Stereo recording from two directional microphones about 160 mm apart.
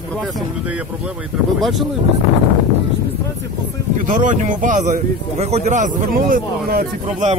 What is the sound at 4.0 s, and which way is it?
Speech, 55° right (ahead or behind).